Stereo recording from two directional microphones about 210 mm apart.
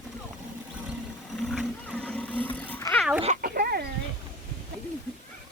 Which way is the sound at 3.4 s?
45° right (ahead or behind).